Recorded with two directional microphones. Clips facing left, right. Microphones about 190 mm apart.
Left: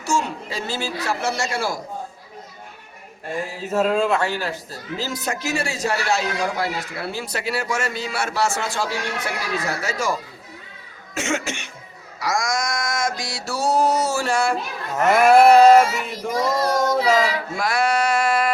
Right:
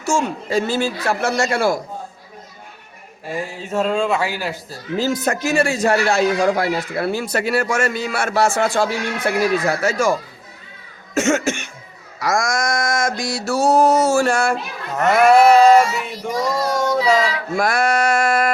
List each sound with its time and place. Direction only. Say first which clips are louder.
0.0 s a man's voice: right 3 dB; 50° right (ahead or behind)
3.2 s male singing: right 1 dB; centre (ahead or behind)
4.2 s speech: right 1 dB; 10° right (ahead or behind)
4.9 s a man's voice: right 8 dB; 50° right (ahead or behind)
11.1 s cough: right 7 dB; 45° right (ahead or behind)
12.2 s a man's voice: right 4 dB; 50° right (ahead or behind)
15.0 s male singing: right 1 dB; 5° left (ahead or behind)
17.6 s a sound: right 3 dB; 50° right (ahead or behind)